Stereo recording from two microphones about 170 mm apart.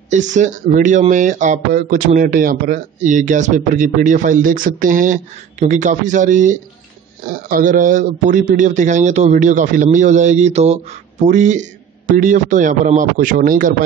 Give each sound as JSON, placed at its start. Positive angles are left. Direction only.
{"t": 0.1, "sound": "speech", "side_deg": -45}